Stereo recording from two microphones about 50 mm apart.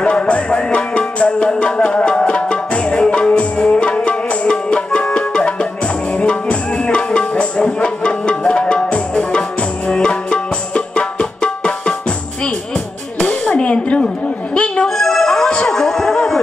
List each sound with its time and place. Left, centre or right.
0.0 s music: left
13.2 s a sound: left
14.5 s music: left
15.0 s music: centre